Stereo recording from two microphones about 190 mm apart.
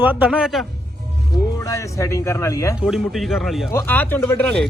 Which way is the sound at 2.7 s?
5° right (ahead or behind).